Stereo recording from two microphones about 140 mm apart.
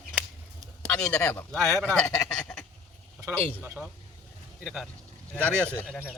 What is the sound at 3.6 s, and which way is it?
A man's voice, 10° right (ahead or behind).